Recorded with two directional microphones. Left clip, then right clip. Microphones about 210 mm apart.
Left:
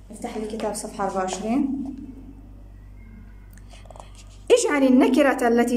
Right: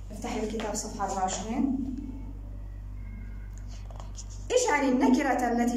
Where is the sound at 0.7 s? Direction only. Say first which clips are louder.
Left 4 dB; 35° left (ahead or behind).